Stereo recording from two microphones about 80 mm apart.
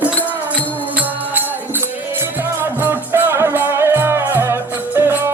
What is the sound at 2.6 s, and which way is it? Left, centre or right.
Music, right.